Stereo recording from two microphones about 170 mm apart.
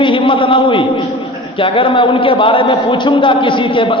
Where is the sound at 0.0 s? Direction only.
30° left (ahead or behind).